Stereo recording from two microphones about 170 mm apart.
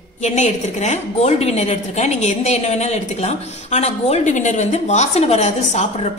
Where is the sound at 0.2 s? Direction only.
45° left (ahead or behind).